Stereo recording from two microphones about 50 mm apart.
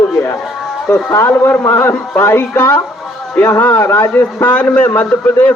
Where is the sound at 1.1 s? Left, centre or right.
Left.